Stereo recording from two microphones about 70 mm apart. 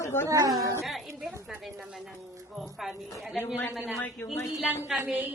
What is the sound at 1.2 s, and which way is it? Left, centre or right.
A woman's voice, centre.